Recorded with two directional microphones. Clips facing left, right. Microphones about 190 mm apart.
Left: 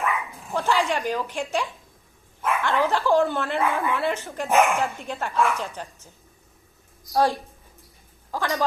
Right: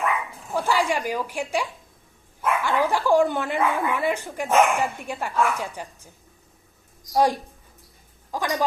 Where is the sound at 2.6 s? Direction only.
15° right (ahead or behind).